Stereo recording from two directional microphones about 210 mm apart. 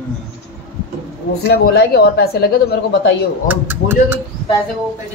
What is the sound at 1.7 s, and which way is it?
A woman's voice, 50° left (ahead or behind).